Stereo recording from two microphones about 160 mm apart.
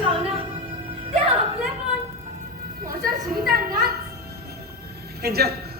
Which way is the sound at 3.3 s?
70° right (ahead or behind).